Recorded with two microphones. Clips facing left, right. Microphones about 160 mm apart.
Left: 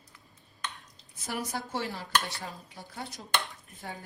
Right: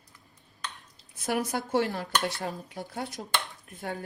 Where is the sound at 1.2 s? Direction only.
55° right (ahead or behind).